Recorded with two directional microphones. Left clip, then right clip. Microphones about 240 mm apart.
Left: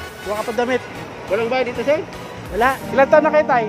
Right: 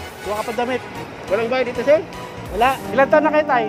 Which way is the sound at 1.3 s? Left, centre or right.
Centre.